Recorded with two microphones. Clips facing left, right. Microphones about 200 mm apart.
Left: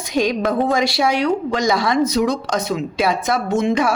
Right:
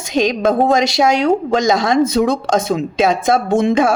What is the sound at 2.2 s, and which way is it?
Speech, 40° right (ahead or behind).